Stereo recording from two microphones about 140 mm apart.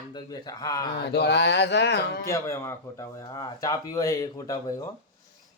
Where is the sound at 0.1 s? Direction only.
30° left (ahead or behind).